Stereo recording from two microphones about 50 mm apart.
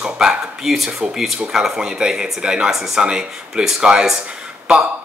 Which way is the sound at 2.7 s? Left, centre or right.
Centre.